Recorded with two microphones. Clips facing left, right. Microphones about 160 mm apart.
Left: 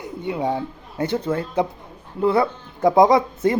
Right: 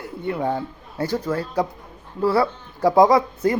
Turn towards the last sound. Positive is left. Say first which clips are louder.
# left 1 dB
turn(degrees=25)  # may be behind; listen again after turning